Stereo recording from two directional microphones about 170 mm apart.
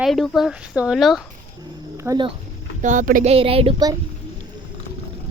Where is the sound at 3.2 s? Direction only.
35° right (ahead or behind).